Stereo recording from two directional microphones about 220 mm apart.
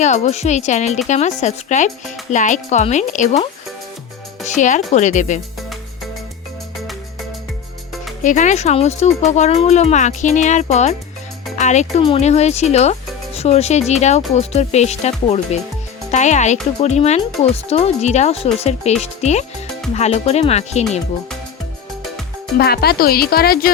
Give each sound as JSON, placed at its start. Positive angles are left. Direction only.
{"t": 0.0, "sound": "speech", "side_deg": 30}
{"t": 4.4, "sound": "speech", "side_deg": 35}
{"t": 8.2, "sound": "speech", "side_deg": 35}
{"t": 22.5, "sound": "speech", "side_deg": 45}